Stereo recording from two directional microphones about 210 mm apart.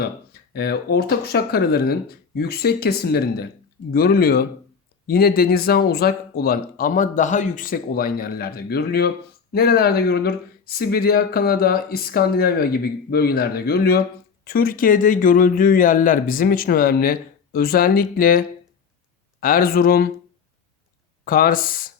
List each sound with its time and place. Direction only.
0.5 s speech: 50° left (ahead or behind)
21.2 s speech: 45° left (ahead or behind)